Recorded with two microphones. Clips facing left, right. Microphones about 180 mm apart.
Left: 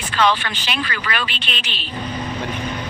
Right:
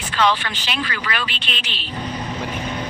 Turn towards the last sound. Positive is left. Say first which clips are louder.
# left 1 dB
turn(degrees=55)  # may be behind; listen again after turning